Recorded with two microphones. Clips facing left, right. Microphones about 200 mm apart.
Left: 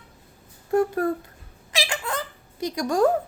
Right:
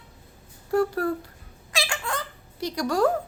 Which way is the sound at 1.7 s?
20° left (ahead or behind).